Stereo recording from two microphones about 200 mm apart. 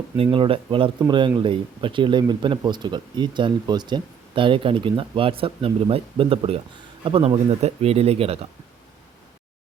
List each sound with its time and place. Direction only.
0.2 s speech: 25° right (ahead or behind)